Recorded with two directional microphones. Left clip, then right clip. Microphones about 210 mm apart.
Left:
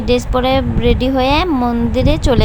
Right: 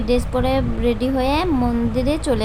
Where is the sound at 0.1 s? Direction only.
15° left (ahead or behind).